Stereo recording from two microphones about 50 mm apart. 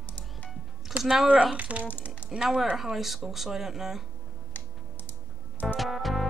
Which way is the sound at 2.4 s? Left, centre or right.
Centre.